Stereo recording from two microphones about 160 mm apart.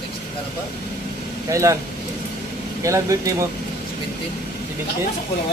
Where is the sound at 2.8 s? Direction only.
20° right (ahead or behind).